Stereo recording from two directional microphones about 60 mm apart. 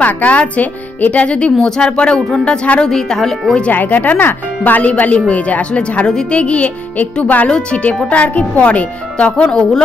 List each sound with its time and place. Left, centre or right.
0.0 s speech: left
2.9 s speech: centre
3.7 s speech: left; by 9.7 s centre